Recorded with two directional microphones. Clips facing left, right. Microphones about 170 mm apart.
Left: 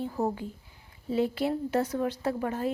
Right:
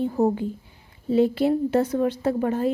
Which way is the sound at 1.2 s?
25° right (ahead or behind).